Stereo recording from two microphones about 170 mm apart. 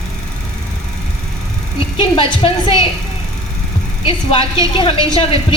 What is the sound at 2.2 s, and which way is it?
Speech, 30° left (ahead or behind).